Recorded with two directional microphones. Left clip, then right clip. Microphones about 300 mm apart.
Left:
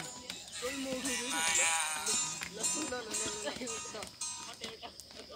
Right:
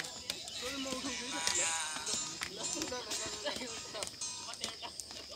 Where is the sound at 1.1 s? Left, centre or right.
Left.